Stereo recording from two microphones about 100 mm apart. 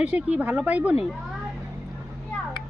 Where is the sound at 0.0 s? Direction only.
15° right (ahead or behind).